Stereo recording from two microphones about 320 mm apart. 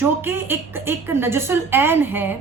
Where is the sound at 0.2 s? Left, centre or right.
Centre.